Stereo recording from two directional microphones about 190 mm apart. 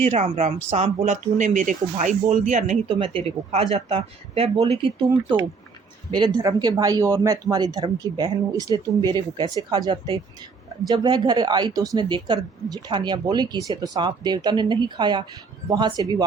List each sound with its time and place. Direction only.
0.1 s speech: 35° right (ahead or behind); by 16.2 s 20° right (ahead or behind)